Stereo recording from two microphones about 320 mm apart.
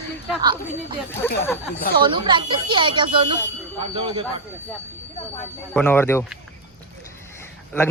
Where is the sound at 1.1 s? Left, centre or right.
Centre.